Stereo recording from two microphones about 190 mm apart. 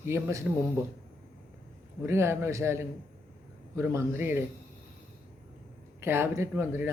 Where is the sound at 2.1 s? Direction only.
15° right (ahead or behind).